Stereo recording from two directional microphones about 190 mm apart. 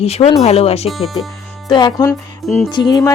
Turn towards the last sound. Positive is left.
turn(degrees=20)  # may be behind; listen again after turning